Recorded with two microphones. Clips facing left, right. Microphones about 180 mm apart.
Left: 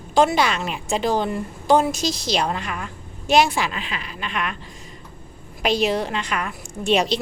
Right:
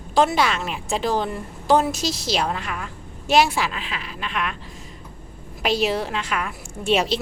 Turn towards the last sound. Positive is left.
turn(degrees=-5)  # may be behind; listen again after turning